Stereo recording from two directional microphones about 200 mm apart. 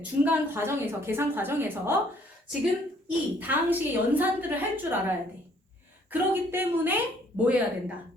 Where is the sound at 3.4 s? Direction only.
10° right (ahead or behind).